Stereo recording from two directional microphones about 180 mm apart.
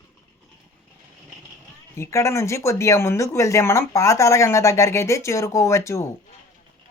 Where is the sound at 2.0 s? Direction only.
15° left (ahead or behind).